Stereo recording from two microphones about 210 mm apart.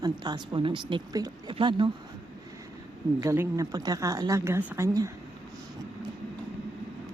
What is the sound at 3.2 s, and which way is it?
A woman's voice, 15° right (ahead or behind).